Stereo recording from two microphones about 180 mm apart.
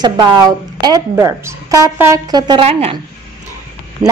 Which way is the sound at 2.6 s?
35° right (ahead or behind).